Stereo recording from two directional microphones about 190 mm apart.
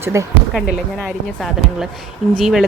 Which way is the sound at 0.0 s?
15° right (ahead or behind).